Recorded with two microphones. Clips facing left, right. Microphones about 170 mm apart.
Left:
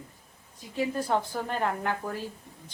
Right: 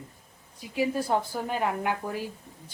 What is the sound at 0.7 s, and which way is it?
A woman's voice, 10° right (ahead or behind).